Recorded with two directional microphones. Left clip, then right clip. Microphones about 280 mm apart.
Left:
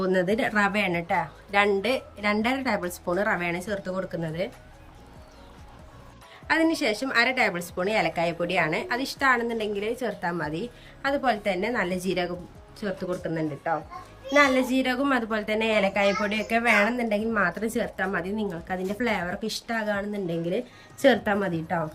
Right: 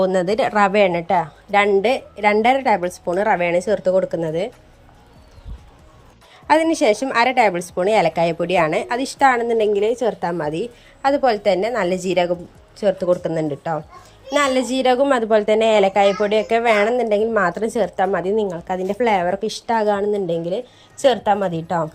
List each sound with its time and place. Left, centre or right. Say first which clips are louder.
0.0 s a woman's voice: right 7 dB; centre
6.5 s a woman's voice: right 8 dB; centre